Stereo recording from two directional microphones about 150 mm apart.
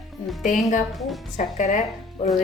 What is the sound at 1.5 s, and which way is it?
Speech, 55° left (ahead or behind).